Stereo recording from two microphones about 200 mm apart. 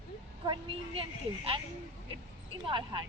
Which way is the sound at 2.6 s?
25° right (ahead or behind).